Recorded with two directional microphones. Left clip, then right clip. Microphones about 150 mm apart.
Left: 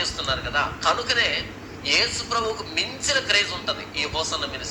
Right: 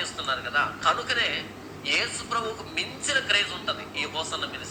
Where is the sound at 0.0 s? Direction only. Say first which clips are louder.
Left 3 dB; 40° left (ahead or behind).